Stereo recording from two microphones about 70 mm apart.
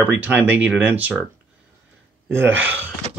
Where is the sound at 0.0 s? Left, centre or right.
Right.